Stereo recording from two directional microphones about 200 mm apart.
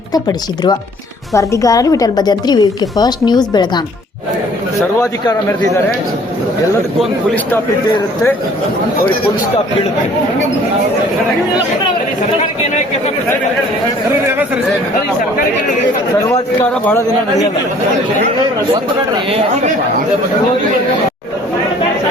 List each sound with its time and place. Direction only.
0.1 s a woman's voice: 20° left (ahead or behind)
4.9 s a man's voice: 15° left (ahead or behind)
7.0 s a man's voice: centre (ahead or behind)
16.3 s a man's voice: 10° left (ahead or behind)
18.7 s speech: 30° right (ahead or behind)